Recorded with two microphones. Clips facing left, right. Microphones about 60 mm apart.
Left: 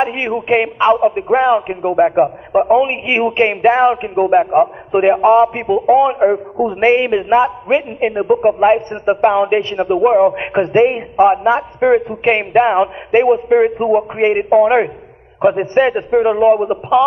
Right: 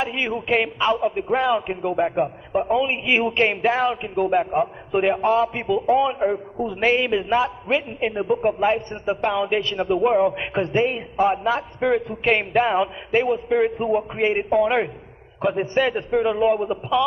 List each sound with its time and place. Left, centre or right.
0.0 s a man's voice: left
10.3 s a man's voice: left